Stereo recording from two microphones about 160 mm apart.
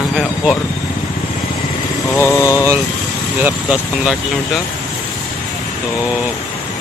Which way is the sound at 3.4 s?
5° right (ahead or behind).